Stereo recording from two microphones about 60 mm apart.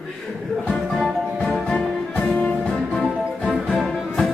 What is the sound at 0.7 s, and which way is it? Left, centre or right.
Music, centre.